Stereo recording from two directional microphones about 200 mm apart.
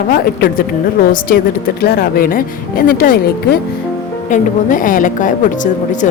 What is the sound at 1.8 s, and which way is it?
A woman's voice, 50° left (ahead or behind).